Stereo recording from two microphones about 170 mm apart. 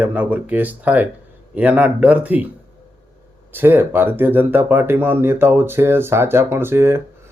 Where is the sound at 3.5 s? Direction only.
10° right (ahead or behind).